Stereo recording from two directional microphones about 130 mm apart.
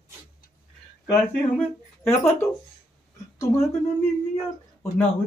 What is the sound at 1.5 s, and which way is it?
Speech, 15° left (ahead or behind).